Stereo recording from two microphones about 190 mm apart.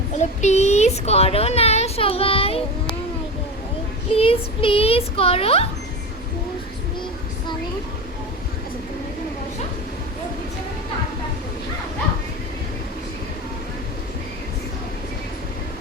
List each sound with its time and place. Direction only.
0.2 s a child's voice: 35° left (ahead or behind)
4.1 s a child's voice: 30° left (ahead or behind)